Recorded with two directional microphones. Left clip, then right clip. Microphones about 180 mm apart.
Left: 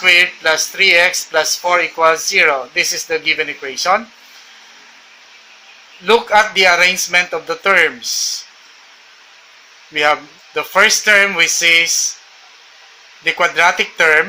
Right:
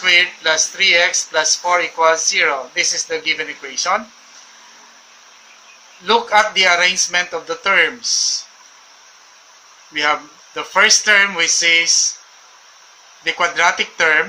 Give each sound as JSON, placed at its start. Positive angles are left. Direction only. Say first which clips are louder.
{"t": 0.0, "sound": "speech", "louder": "left 3 dB", "side_deg": 35}
{"t": 6.1, "sound": "speech", "louder": "left 2 dB", "side_deg": 35}
{"t": 9.9, "sound": "speech", "louder": "left 3 dB", "side_deg": 35}
{"t": 13.2, "sound": "speech", "louder": "left 3 dB", "side_deg": 35}